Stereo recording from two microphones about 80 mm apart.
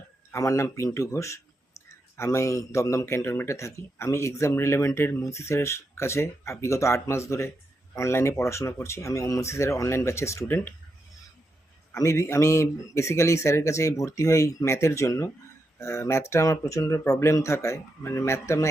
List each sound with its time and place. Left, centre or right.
0.3 s speech: left
3.2 s speech: left
11.9 s speech: left